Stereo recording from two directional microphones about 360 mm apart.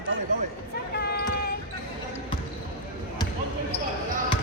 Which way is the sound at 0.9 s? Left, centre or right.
Left.